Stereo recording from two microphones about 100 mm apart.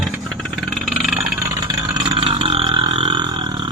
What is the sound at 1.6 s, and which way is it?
Vehicle, 40° right (ahead or behind).